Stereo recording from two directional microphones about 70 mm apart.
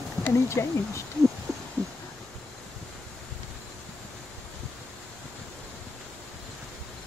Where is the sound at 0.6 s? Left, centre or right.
Left.